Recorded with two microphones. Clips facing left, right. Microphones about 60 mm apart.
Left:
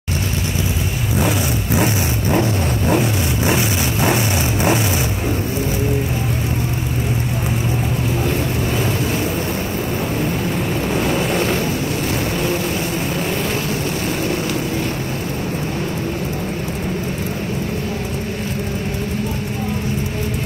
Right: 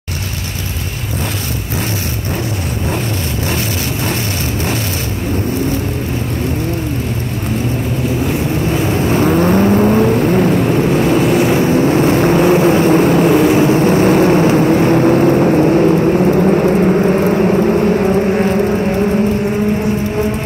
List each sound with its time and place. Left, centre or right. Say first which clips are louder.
3.4 s vehicle: left 2 dB; centre
9.1 s vehicle: right 10 dB; right
11.9 s vehicle: right 10 dB; right
13.5 s vehicle: right 11 dB; right
13.7 s vehicle: right 12 dB; right